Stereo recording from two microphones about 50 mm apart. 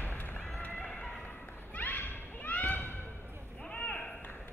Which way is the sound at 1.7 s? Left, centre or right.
Left.